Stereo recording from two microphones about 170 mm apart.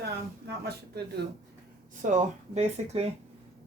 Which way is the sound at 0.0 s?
75° right (ahead or behind).